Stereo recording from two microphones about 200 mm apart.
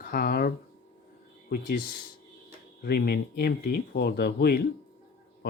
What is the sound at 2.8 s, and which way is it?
Speech, 50° left (ahead or behind).